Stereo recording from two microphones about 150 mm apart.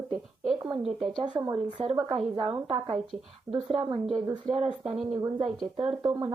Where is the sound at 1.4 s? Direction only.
20° right (ahead or behind).